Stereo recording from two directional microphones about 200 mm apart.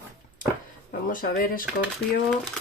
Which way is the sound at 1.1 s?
45° left (ahead or behind).